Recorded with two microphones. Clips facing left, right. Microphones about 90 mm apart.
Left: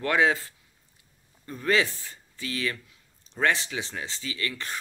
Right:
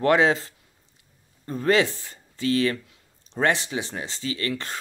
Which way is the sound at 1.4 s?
40° right (ahead or behind).